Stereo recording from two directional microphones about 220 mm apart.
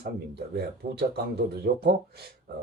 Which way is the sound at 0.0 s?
45° right (ahead or behind).